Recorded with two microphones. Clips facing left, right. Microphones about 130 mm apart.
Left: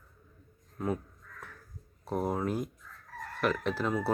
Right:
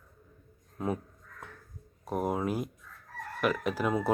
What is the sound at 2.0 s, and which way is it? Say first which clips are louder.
Speech: right 1 dB; 10° right (ahead or behind).